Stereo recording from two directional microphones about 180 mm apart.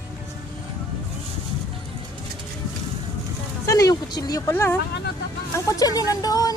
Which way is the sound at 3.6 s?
20° left (ahead or behind).